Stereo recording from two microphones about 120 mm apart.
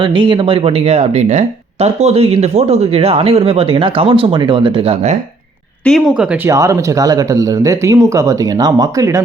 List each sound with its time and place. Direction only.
0.0 s speech: 45° right (ahead or behind)
5.8 s speech: 5° left (ahead or behind)
6.1 s speech: 15° right (ahead or behind)